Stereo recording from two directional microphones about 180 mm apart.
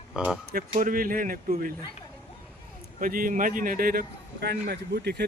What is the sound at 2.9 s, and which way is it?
A man's voice, 50° right (ahead or behind).